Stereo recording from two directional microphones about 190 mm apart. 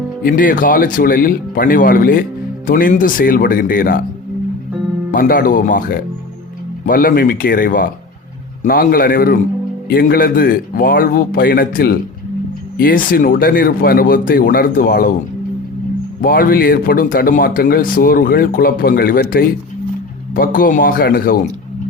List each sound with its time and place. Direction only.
0.2 s a man's voice: 45° left (ahead or behind)
5.1 s a man's voice: 45° left (ahead or behind)
16.2 s a man's voice: 50° left (ahead or behind)